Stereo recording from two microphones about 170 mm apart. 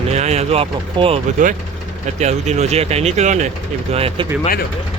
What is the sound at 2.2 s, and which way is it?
Speech, 40° right (ahead or behind).